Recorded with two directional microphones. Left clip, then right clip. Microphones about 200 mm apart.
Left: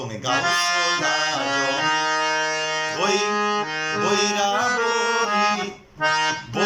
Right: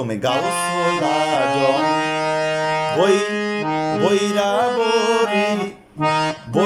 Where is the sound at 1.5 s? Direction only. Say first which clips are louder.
Right 4 dB; 25° right (ahead or behind).